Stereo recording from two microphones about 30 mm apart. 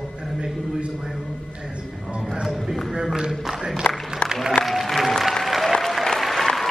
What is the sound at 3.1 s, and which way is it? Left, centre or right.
Speech, right.